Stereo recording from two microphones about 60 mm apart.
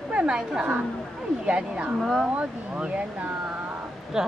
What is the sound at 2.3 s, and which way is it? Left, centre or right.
A woman's voice, right.